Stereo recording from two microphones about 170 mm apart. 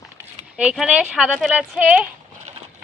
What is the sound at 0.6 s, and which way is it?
A woman's voice, 5° right (ahead or behind).